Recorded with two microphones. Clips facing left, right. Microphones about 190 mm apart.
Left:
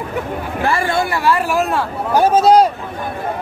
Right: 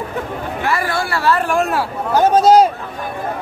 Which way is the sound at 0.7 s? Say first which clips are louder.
Left 3 dB; 25° left (ahead or behind).